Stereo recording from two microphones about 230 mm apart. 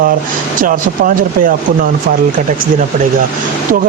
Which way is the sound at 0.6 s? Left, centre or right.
Right.